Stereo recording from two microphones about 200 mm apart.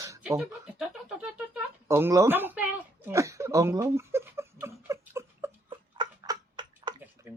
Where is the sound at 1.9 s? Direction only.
10° right (ahead or behind).